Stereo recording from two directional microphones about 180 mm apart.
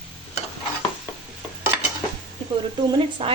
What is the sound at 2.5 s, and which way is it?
Speech, 25° right (ahead or behind).